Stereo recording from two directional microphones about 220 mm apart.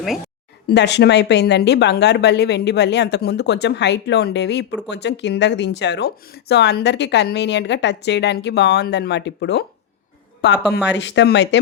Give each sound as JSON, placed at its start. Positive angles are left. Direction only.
{"t": 0.7, "sound": "speech", "side_deg": 50}